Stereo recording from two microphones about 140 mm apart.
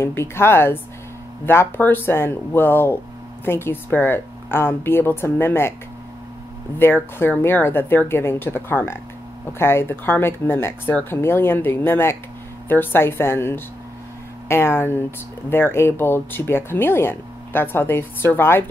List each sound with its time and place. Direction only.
0.0 s speech: 15° left (ahead or behind)
6.8 s speech: 15° left (ahead or behind)